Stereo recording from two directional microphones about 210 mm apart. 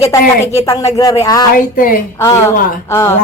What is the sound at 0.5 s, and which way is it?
Speech, 15° left (ahead or behind).